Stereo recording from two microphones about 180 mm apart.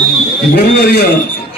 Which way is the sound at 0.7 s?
60° left (ahead or behind).